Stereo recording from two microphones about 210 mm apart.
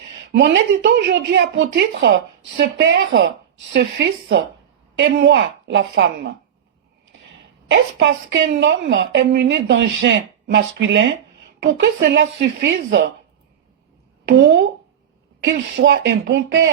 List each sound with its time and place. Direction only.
0.2 s a woman's voice: 55° right (ahead or behind)
7.7 s a woman's voice: 55° right (ahead or behind)
15.4 s a woman's voice: 60° right (ahead or behind)